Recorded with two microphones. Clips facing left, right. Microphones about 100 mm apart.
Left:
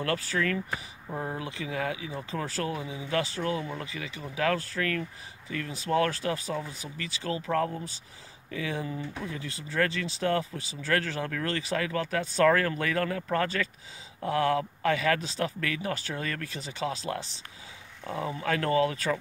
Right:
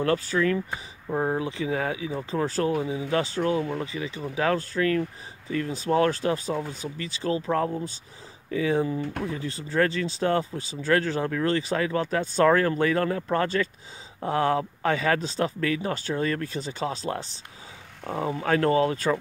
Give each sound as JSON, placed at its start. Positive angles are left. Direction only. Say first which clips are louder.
{"t": 0.0, "sound": "speech", "louder": "right 6 dB", "side_deg": -25}
{"t": 1.1, "sound": "speech", "louder": "right 8 dB", "side_deg": -45}
{"t": 1.4, "sound": "speech", "louder": "right 5 dB", "side_deg": -30}